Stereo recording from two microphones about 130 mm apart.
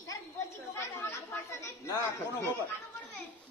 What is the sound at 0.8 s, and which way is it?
A man's voice, 20° left (ahead or behind).